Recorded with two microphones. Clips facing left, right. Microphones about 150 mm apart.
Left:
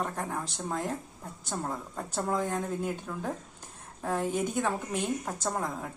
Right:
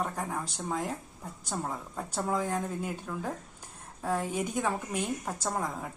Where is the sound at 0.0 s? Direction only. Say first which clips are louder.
Even; centre (ahead or behind).